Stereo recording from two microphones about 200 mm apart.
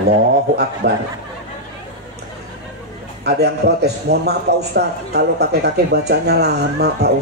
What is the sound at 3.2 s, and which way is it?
A man's voice, 55° right (ahead or behind).